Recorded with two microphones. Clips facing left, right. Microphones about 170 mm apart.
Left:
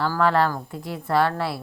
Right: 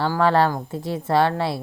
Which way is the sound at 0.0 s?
30° right (ahead or behind).